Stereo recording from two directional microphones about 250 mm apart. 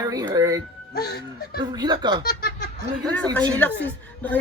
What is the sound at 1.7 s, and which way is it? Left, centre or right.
Speech, centre.